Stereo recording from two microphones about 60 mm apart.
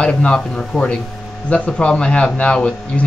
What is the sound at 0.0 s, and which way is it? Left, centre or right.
A man's voice, centre.